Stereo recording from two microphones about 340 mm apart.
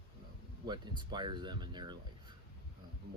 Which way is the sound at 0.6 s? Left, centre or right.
Centre.